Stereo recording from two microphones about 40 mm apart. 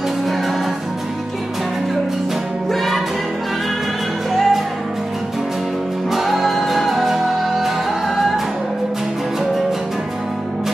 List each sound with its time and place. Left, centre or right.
2.7 s music: centre
4.3 s music: centre
6.1 s music: centre